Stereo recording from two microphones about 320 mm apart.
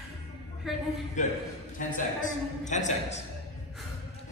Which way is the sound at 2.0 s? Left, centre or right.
Left.